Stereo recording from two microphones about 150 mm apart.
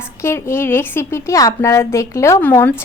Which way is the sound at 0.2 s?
15° left (ahead or behind).